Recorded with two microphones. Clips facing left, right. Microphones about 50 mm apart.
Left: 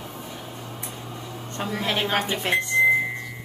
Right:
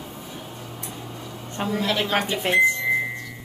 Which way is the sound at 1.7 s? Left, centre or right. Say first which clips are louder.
Right 1 dB; left.